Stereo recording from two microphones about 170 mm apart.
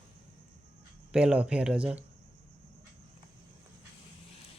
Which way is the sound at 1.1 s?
5° right (ahead or behind).